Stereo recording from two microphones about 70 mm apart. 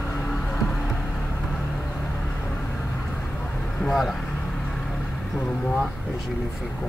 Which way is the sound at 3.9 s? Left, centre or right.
Centre.